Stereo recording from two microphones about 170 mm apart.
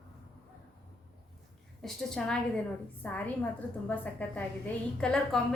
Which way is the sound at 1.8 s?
5° left (ahead or behind).